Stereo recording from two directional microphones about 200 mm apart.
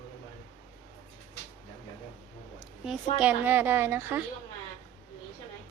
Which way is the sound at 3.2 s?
10° right (ahead or behind).